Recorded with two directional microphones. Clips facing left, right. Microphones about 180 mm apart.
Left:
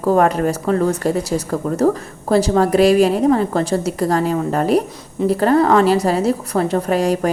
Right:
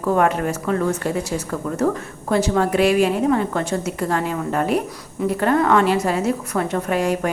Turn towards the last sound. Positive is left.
turn(degrees=35)  # may be behind; listen again after turning